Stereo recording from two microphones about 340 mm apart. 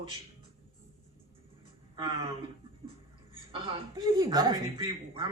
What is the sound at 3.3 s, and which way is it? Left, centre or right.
Speech, centre.